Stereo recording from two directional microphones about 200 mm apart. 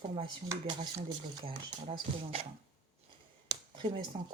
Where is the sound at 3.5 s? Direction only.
25° right (ahead or behind).